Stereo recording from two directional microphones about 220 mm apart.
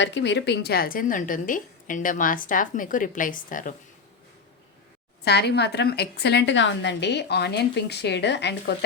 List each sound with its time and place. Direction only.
0.0 s speech: 55° left (ahead or behind); by 3.8 s 35° left (ahead or behind)
5.2 s a woman's voice: 50° left (ahead or behind)